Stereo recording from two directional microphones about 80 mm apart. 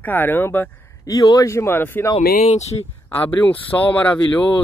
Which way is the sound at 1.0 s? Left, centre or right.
Left.